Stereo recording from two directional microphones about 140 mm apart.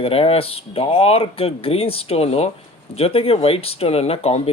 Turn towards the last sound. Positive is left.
turn(degrees=45)  # may be behind; listen again after turning